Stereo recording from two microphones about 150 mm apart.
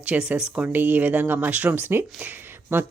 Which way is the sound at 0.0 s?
10° right (ahead or behind).